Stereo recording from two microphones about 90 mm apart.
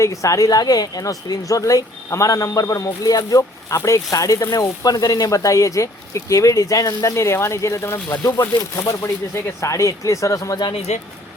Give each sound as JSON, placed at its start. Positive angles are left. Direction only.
{"t": 0.0, "sound": "a woman's voice", "side_deg": 35}